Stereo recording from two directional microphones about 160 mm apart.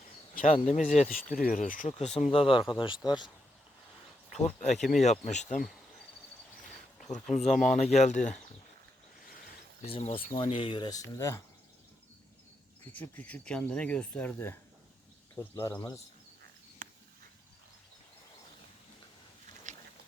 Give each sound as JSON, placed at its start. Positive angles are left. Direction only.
{"t": 0.4, "sound": "speech", "side_deg": 40}
{"t": 1.1, "sound": "speech", "side_deg": 60}
{"t": 1.9, "sound": "speech", "side_deg": 40}
{"t": 4.3, "sound": "speech", "side_deg": 45}
{"t": 7.0, "sound": "speech", "side_deg": 45}
{"t": 9.8, "sound": "speech", "side_deg": 35}
{"t": 12.9, "sound": "speech", "side_deg": 10}
{"t": 16.8, "sound": "a sound", "side_deg": -55}
{"t": 19.7, "sound": "a sound", "side_deg": -50}